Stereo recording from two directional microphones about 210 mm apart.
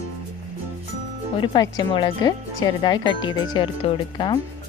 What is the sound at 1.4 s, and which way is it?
Speech, 20° left (ahead or behind).